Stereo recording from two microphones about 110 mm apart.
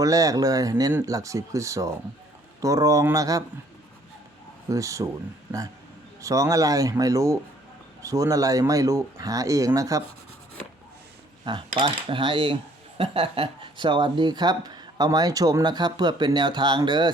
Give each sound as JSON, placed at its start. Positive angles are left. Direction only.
{"t": 0.0, "sound": "speech", "side_deg": -30}
{"t": 4.7, "sound": "speech", "side_deg": -30}
{"t": 11.5, "sound": "speech", "side_deg": -45}